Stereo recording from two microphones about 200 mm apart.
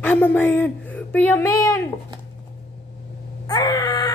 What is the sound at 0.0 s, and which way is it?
Speech, 10° left (ahead or behind).